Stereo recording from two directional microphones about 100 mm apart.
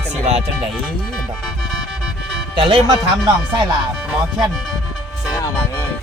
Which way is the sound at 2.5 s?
60° right (ahead or behind).